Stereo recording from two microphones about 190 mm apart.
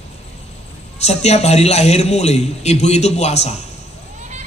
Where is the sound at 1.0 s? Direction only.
35° left (ahead or behind).